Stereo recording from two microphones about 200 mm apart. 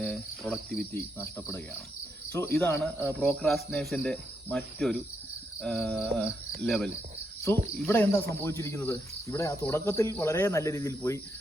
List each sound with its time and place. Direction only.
0.0 s cricket: centre (ahead or behind)
0.9 s speech: 15° left (ahead or behind)
3.4 s cricket: centre (ahead or behind)
7.8 s speech: 10° left (ahead or behind)